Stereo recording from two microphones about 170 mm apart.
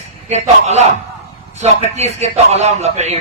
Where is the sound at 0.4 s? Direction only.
40° right (ahead or behind).